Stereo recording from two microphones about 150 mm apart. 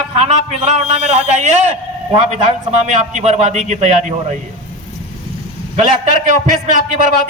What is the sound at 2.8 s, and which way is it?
A man's voice, 55° right (ahead or behind).